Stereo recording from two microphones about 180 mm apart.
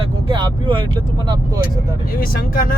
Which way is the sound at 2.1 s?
55° left (ahead or behind).